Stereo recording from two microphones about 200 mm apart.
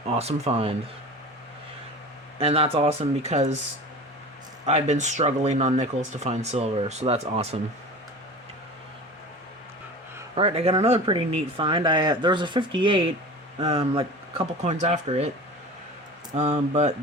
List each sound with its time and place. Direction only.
0.1 s speech: 30° right (ahead or behind)
2.4 s speech: 30° right (ahead or behind)
4.6 s speech: 35° right (ahead or behind)
10.3 s speech: 30° right (ahead or behind)
16.3 s speech: 35° right (ahead or behind)